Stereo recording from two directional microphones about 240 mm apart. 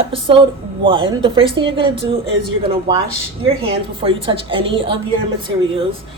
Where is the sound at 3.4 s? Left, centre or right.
Right.